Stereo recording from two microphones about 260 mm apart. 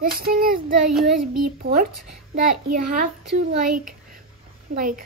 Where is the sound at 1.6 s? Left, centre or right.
Right.